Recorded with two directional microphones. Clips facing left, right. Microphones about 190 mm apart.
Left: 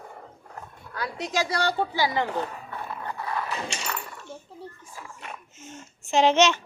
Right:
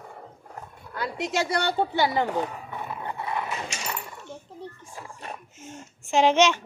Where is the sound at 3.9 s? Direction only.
15° right (ahead or behind).